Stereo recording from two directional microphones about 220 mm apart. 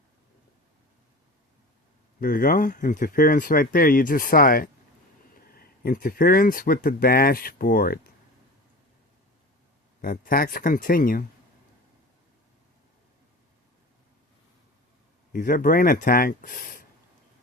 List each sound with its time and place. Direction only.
2.2 s speech: 40° left (ahead or behind)
10.0 s speech: 40° left (ahead or behind)
15.3 s speech: 40° left (ahead or behind)